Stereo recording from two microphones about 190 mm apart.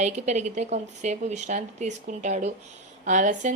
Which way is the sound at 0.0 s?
40° right (ahead or behind).